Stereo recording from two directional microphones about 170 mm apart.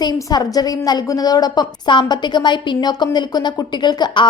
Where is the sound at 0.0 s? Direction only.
25° left (ahead or behind).